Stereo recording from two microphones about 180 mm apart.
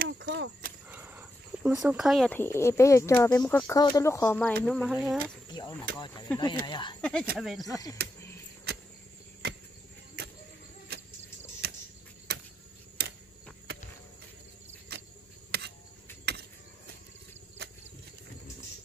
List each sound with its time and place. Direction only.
0.2 s speech: 90° right
0.8 s a sound: 10° right (ahead or behind)
2.3 s speech: 15° left (ahead or behind)
4.9 s speech: 10° right (ahead or behind)
5.5 s speech: 20° left (ahead or behind)
7.0 s speech: 5° left (ahead or behind)
7.7 s speech: 20° left (ahead or behind)
9.4 s cricket: 65° right (ahead or behind)
11.6 s a sound: 60° right (ahead or behind)
15.5 s a sound: 65° right (ahead or behind)
17.6 s vehicle: 65° right (ahead or behind)